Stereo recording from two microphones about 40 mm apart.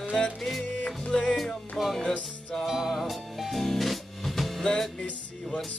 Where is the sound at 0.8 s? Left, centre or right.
Left.